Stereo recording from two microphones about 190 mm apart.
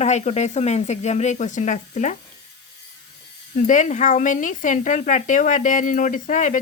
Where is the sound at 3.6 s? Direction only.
40° left (ahead or behind).